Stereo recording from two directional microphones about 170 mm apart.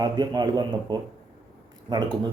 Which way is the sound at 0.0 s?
25° right (ahead or behind).